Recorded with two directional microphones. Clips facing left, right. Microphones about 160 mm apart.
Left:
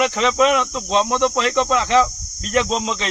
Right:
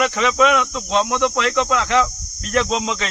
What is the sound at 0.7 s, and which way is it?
Speech, 5° left (ahead or behind).